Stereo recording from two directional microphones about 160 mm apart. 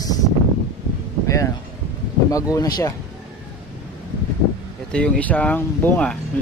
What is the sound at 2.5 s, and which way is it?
Speech, 20° left (ahead or behind).